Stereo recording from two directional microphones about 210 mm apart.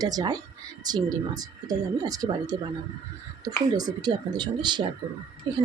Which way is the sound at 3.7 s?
20° right (ahead or behind).